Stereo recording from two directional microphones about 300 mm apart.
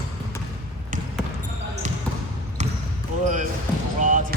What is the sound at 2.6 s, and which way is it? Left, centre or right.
Basketball bounce, right.